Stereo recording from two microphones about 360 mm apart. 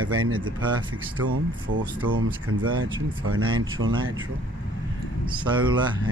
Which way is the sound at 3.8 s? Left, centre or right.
Right.